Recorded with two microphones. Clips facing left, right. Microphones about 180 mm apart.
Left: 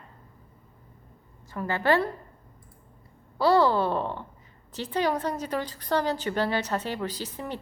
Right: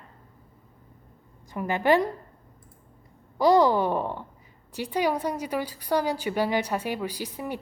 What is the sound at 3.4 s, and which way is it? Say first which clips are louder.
A woman's voice: right 2 dB; 15° right (ahead or behind).